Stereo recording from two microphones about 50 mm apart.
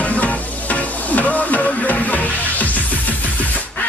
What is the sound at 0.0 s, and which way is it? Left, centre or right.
Music, left.